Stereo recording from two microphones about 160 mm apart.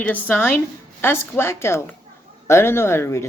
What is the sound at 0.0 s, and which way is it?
A woman's voice, 10° left (ahead or behind).